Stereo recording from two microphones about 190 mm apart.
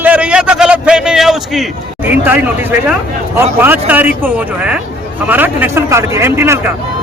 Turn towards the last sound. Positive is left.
turn(degrees=-15)  # may be behind; listen again after turning